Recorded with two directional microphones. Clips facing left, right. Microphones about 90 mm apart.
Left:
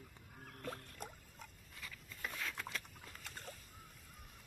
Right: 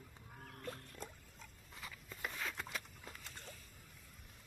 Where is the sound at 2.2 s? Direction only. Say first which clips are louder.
Right 1 dB; 10° right (ahead or behind).